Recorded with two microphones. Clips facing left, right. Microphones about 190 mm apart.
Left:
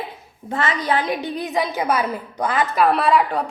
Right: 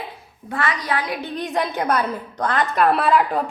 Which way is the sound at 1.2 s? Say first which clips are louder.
Left 1 dB; 10° left (ahead or behind).